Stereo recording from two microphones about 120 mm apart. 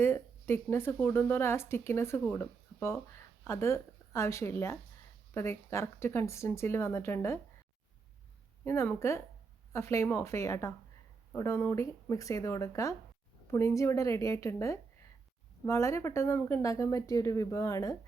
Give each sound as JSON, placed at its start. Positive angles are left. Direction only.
{"t": 0.0, "sound": "speech", "side_deg": 20}
{"t": 8.6, "sound": "speech", "side_deg": 20}